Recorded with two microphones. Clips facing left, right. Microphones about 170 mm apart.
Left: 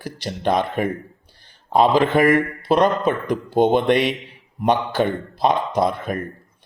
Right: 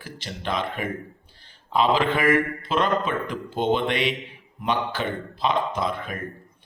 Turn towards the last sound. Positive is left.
turn(degrees=40)  # may be behind; listen again after turning